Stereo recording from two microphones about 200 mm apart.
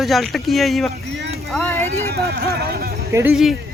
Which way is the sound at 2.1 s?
50° right (ahead or behind).